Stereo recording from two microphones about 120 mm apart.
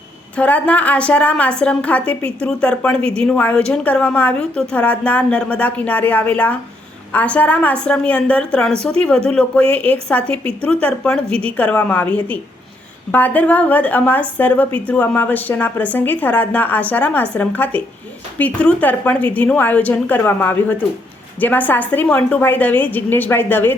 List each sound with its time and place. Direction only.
0.3 s speech: 10° left (ahead or behind)